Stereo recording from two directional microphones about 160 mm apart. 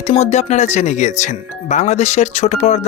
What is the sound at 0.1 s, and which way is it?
Speech, 45° left (ahead or behind).